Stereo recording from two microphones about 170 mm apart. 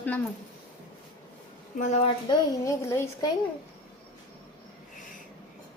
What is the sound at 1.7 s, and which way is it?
Speech, 45° left (ahead or behind).